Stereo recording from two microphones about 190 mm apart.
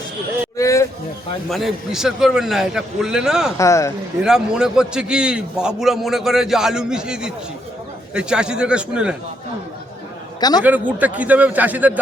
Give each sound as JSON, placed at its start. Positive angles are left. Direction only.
{"t": 0.5, "sound": "a sound", "side_deg": 15}
{"t": 1.5, "sound": "a man's voice", "side_deg": 0}
{"t": 3.6, "sound": "speech", "side_deg": 15}
{"t": 4.2, "sound": "a man's voice", "side_deg": -5}
{"t": 10.6, "sound": "a man's voice", "side_deg": -10}